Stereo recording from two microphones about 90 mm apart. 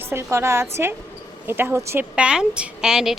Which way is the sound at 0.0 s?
25° right (ahead or behind).